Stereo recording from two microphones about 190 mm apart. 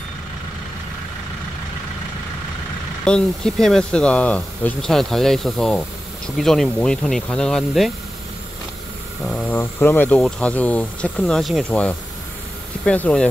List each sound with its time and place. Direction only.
3.1 s speech: 5° left (ahead or behind)
9.2 s speech: 5° left (ahead or behind)